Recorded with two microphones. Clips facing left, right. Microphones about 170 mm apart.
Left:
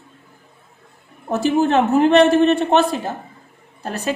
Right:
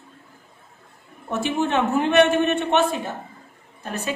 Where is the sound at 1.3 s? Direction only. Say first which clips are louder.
Left 6 dB; 35° left (ahead or behind).